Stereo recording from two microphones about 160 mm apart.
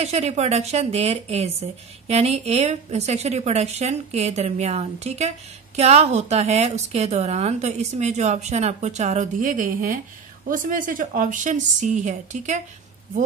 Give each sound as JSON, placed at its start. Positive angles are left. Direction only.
{"t": 0.0, "sound": "speech", "side_deg": -40}